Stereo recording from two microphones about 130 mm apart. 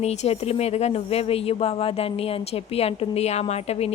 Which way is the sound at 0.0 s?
55° left (ahead or behind).